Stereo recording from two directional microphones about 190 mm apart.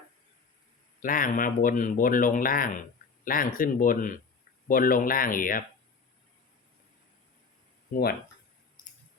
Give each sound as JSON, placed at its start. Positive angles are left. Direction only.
{"t": 1.0, "sound": "speech", "side_deg": 45}